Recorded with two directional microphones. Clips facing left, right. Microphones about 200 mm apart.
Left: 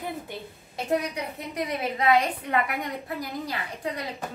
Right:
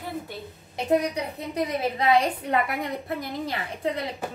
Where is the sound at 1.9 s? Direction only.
30° right (ahead or behind).